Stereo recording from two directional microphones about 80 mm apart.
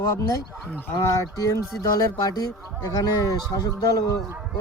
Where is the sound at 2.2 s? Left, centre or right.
Left.